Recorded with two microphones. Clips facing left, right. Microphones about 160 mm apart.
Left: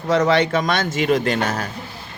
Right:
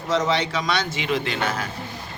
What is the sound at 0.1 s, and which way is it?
Speech, 55° left (ahead or behind).